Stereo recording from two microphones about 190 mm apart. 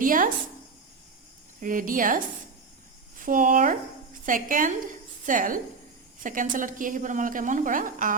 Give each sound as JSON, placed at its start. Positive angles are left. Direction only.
{"t": 0.0, "sound": "a woman's voice", "side_deg": -45}
{"t": 1.6, "sound": "a woman's voice", "side_deg": -45}